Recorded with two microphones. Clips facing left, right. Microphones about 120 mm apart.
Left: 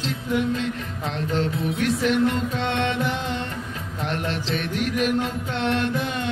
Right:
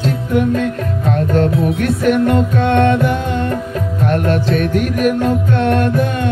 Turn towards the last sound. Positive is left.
turn(degrees=-50)  # may be behind; listen again after turning